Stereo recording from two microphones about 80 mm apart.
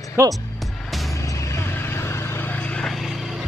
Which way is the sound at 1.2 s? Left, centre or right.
Left.